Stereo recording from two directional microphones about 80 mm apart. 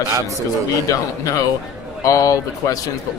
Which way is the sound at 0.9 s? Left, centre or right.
Left.